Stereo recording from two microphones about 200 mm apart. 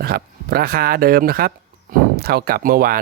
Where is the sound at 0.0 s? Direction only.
50° right (ahead or behind).